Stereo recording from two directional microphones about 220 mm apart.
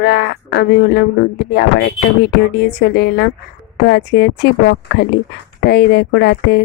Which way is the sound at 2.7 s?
45° left (ahead or behind).